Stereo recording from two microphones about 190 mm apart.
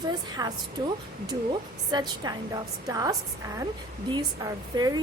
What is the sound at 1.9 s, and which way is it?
A woman's voice, 20° right (ahead or behind).